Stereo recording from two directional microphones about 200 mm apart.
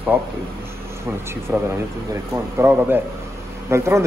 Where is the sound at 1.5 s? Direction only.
10° right (ahead or behind).